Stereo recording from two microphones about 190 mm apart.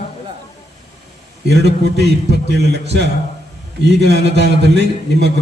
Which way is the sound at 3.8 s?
65° right (ahead or behind).